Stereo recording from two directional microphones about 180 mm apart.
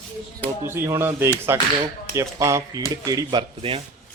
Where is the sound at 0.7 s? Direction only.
15° right (ahead or behind).